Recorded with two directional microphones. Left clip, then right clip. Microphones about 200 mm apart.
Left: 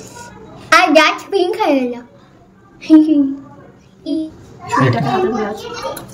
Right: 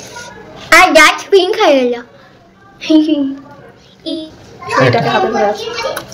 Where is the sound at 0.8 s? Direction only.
5° left (ahead or behind).